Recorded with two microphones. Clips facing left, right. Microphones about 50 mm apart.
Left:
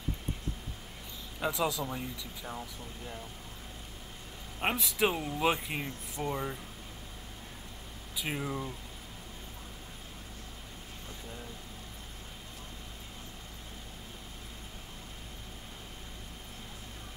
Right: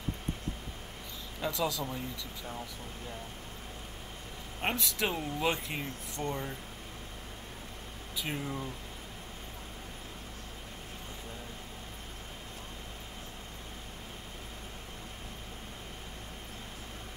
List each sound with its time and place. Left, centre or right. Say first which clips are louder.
1.4 s speech: left 1 dB; centre
4.6 s speech: left 3 dB; centre
8.2 s speech: left 1 dB; centre